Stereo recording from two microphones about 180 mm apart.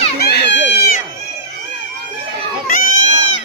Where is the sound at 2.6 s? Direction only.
50° left (ahead or behind).